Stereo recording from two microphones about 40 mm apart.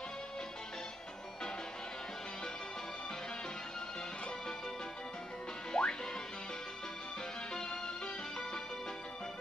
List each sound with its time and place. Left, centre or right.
5.7 s music: centre
7.5 s music: centre